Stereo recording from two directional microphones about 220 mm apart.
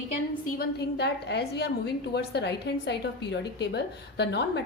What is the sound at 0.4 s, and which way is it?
A woman's voice, 40° left (ahead or behind).